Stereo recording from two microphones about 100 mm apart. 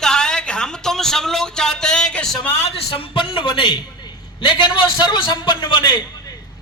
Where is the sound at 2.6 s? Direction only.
80° left; by 5.9 s 55° left (ahead or behind).